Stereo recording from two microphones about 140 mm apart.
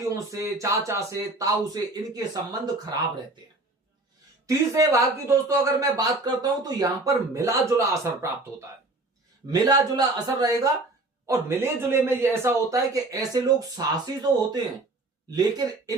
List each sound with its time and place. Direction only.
0.1 s speech: 25° right (ahead or behind)
4.4 s speech: 20° right (ahead or behind)
9.5 s speech: 30° right (ahead or behind)